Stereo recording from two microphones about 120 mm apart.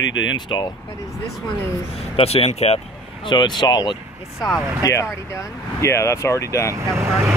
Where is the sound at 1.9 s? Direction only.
55° left (ahead or behind).